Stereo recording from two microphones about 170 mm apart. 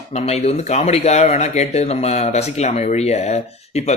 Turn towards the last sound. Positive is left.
turn(degrees=40)  # may be behind; listen again after turning